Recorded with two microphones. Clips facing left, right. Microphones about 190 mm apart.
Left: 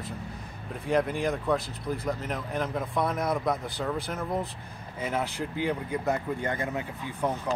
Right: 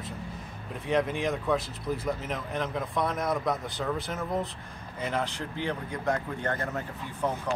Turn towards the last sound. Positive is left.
turn(degrees=10)  # may be behind; listen again after turning